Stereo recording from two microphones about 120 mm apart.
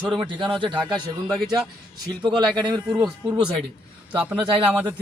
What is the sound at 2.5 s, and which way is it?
Speech, 35° right (ahead or behind).